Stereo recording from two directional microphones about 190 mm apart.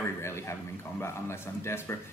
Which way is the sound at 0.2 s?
15° left (ahead or behind).